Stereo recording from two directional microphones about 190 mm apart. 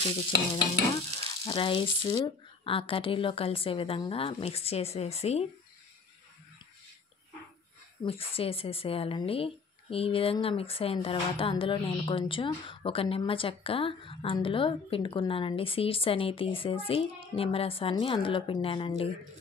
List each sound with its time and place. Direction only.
1.1 s speech: 25° left (ahead or behind)
8.0 s speech: 30° left (ahead or behind)